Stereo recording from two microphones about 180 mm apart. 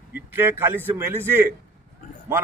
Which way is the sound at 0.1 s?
10° right (ahead or behind).